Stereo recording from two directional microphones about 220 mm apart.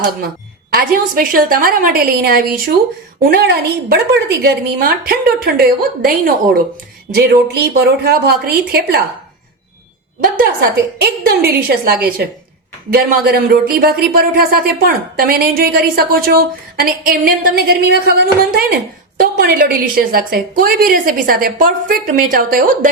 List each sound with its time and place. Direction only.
0.7 s a woman's voice: 40° right (ahead or behind)
10.9 s speech: 45° right (ahead or behind)